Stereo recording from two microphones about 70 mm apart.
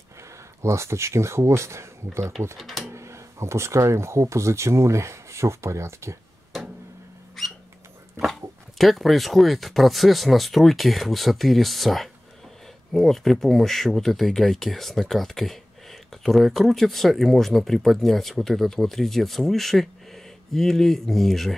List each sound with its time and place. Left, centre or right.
0.6 s speech: right
2.5 s speech: centre
2.9 s speech: right
7.4 s cat: centre
8.2 s speech: centre